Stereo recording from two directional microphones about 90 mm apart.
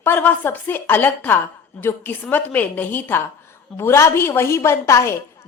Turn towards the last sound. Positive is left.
turn(degrees=30)  # may be behind; listen again after turning